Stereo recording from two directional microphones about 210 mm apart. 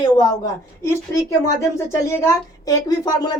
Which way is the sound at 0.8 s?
15° left (ahead or behind).